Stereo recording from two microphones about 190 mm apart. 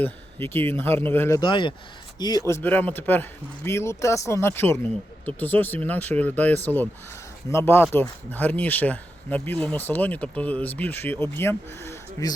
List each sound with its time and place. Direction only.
0.0 s speech: 10° left (ahead or behind)
1.4 s speech: 25° left (ahead or behind)
2.5 s speech: 10° left (ahead or behind)